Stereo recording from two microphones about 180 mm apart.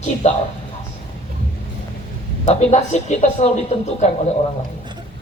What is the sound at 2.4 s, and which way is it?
A man's voice, 40° left (ahead or behind).